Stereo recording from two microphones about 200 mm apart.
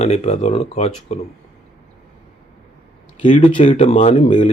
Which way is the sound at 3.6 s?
35° left (ahead or behind).